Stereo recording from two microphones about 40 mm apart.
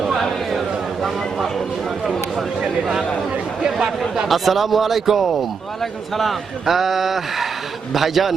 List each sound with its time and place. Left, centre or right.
0.0 s a sound: centre
3.6 s speech: centre
4.3 s a man's voice: centre